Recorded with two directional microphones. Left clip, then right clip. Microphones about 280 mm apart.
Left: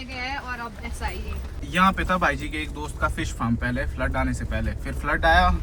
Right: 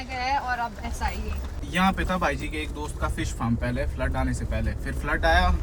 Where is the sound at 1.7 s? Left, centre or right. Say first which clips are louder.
Left 4 dB; centre.